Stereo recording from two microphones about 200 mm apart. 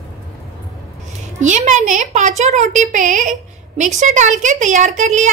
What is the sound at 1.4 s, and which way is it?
Speech, 35° right (ahead or behind).